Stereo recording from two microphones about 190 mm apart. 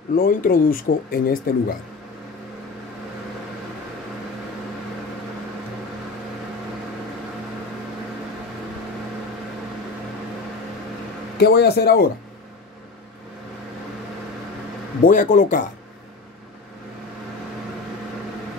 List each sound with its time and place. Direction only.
0.1 s speech: 50° left (ahead or behind)
11.3 s speech: 60° left (ahead or behind)
15.0 s speech: 45° left (ahead or behind)